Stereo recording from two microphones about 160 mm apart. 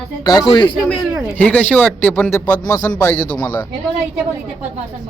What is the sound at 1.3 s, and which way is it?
A man's voice, 10° left (ahead or behind).